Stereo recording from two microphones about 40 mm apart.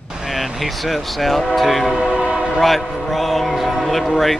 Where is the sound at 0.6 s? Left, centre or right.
Centre.